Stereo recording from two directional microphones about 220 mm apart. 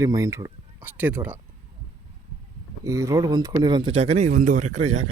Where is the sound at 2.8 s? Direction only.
15° right (ahead or behind); by 5.0 s 30° right (ahead or behind).